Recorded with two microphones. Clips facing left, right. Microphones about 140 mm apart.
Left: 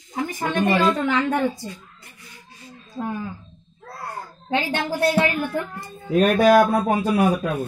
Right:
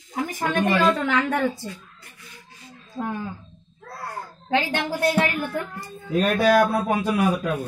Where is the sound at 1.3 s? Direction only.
20° left (ahead or behind).